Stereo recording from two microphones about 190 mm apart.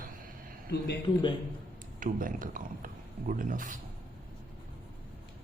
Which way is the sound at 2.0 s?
45° right (ahead or behind).